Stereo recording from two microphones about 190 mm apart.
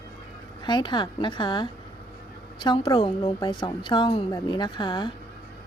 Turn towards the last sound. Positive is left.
turn(degrees=25)  # may be behind; listen again after turning